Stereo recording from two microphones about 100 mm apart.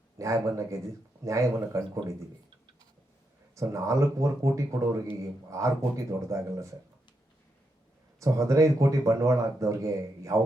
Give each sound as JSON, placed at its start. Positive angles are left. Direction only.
{"t": 0.2, "sound": "speech", "side_deg": -30}
{"t": 3.5, "sound": "speech", "side_deg": -30}
{"t": 8.2, "sound": "speech", "side_deg": -30}